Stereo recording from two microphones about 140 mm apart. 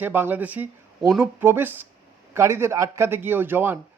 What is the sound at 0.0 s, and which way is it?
Speech, 15° right (ahead or behind).